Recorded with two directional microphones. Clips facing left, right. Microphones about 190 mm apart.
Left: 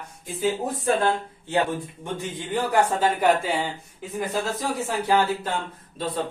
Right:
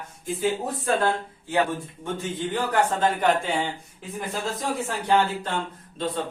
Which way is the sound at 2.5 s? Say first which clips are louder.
Left 3 dB; 10° left (ahead or behind).